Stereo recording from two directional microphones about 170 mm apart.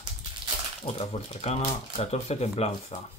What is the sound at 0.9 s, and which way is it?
Speech, 40° left (ahead or behind).